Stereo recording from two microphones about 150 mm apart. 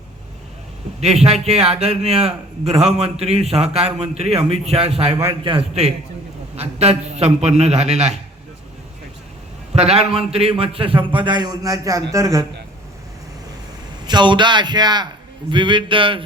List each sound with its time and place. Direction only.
0.9 s a man's voice: 45° right (ahead or behind)
9.7 s a man's voice: 45° right (ahead or behind); by 12.5 s 20° right (ahead or behind)
14.1 s a man's voice: 30° right (ahead or behind)